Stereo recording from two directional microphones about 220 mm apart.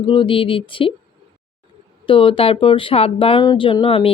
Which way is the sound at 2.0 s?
25° left (ahead or behind).